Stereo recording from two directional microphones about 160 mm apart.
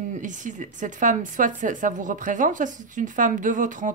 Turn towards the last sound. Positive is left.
turn(degrees=-55)  # may be behind; listen again after turning